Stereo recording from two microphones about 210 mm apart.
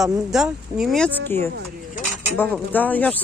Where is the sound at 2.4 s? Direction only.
10° left (ahead or behind).